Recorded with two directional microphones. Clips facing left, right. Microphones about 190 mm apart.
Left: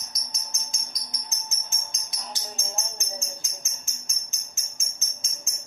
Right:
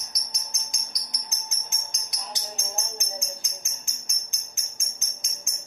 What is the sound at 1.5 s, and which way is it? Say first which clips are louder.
Tambourine: even; 15° right (ahead or behind).